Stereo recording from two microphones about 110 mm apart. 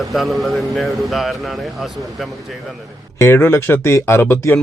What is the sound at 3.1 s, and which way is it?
Speech, 25° left (ahead or behind).